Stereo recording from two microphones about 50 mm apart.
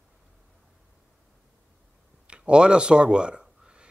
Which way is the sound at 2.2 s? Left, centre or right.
Right.